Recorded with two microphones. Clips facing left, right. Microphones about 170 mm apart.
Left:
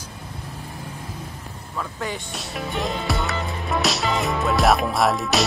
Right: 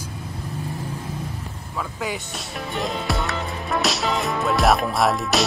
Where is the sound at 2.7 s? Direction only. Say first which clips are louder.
Even; centre (ahead or behind).